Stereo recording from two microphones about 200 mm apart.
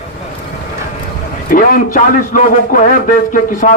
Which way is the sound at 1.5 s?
45° left (ahead or behind).